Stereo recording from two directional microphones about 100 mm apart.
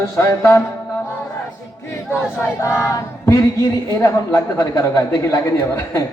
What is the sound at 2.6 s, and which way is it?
Speech, 30° left (ahead or behind).